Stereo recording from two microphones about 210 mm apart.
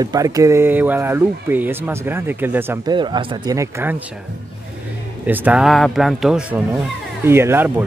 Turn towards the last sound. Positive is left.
turn(degrees=-10)  # may be behind; listen again after turning